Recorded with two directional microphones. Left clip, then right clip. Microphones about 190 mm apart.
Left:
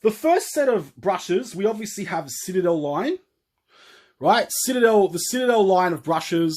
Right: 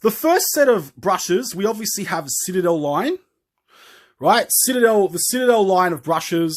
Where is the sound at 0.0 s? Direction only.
45° right (ahead or behind).